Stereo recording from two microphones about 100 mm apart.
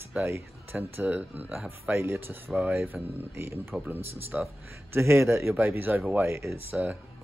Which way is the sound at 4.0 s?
85° right.